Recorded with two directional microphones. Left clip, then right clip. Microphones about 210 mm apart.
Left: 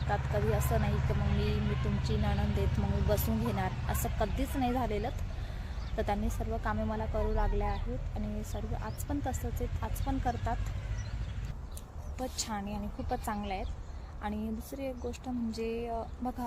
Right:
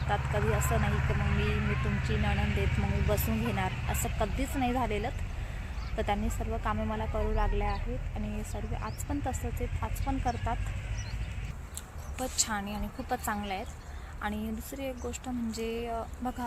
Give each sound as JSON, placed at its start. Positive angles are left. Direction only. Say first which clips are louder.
{"t": 0.3, "sound": "speech", "louder": "even", "side_deg": -25}
{"t": 3.6, "sound": "speech", "louder": "right 2 dB", "side_deg": 0}
{"t": 8.8, "sound": "speech", "louder": "right 2 dB", "side_deg": 5}
{"t": 12.1, "sound": "speech", "louder": "right 4 dB", "side_deg": 0}